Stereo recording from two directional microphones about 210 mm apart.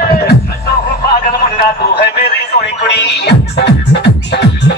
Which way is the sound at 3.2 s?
50° left (ahead or behind).